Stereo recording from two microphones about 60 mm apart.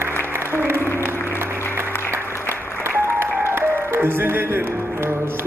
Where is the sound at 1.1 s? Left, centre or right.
Left.